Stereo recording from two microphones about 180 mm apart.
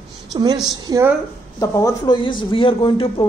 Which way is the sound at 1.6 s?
20° left (ahead or behind).